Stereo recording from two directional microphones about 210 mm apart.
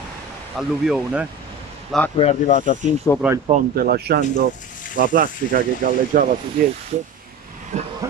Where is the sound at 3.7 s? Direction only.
45° right (ahead or behind).